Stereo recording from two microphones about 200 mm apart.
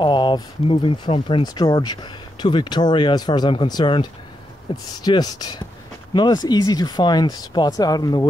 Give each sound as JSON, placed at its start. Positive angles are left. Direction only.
{"t": 0.0, "sound": "speech", "side_deg": 25}